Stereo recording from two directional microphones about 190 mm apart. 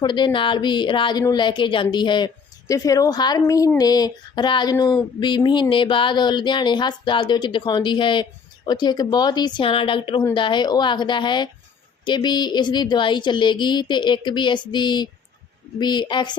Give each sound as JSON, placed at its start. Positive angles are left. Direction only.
{"t": 0.0, "sound": "speech", "side_deg": 25}